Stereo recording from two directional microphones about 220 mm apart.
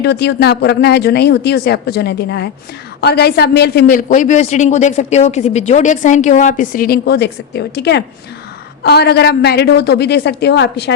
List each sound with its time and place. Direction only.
0.0 s a man's voice: 50° left (ahead or behind)